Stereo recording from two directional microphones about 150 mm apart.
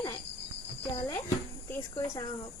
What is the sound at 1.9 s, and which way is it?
Speech, 25° left (ahead or behind).